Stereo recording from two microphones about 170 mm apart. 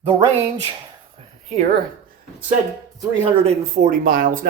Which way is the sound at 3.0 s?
35° right (ahead or behind).